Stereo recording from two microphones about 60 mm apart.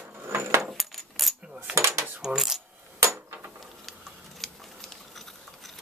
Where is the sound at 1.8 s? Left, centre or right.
Right.